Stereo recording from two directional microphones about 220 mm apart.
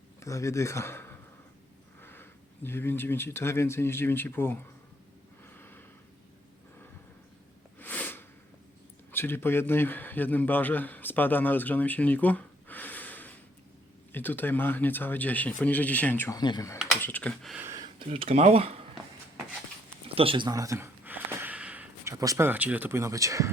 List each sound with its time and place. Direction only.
0.2 s speech: 15° left (ahead or behind)
2.0 s a sound: 10° left (ahead or behind)
2.6 s speech: 10° left (ahead or behind)
5.5 s a sound: 10° left (ahead or behind)
7.8 s sneeze: 5° left (ahead or behind)
9.1 s a man's voice: 10° left (ahead or behind)
16.7 s computer keyboard: centre (ahead or behind)
17.6 s speech: 15° right (ahead or behind)
20.1 s a sound: 25° right (ahead or behind)